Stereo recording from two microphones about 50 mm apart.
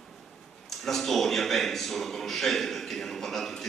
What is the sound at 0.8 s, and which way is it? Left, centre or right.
Speech, centre.